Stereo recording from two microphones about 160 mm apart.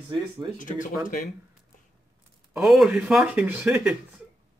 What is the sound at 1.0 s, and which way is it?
Speech, 55° left (ahead or behind).